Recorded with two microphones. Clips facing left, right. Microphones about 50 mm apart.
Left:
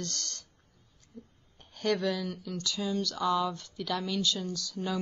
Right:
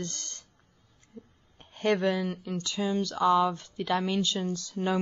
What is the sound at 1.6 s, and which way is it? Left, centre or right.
A woman's voice, right.